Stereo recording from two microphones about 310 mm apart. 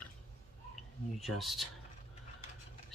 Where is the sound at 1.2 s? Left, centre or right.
Centre.